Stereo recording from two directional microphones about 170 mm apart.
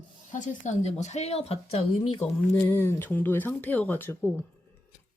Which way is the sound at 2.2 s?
10° left (ahead or behind).